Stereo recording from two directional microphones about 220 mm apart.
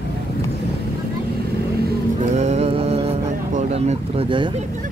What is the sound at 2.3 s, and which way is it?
Music, 30° right (ahead or behind).